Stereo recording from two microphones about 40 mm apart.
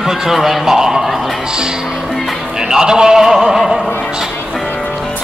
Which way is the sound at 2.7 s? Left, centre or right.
Centre.